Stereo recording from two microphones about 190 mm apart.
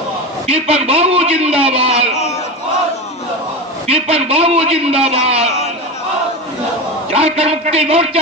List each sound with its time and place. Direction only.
0.5 s a man's voice: 30° right (ahead or behind)
3.8 s a man's voice: 35° right (ahead or behind)
7.1 s a man's voice: 35° right (ahead or behind)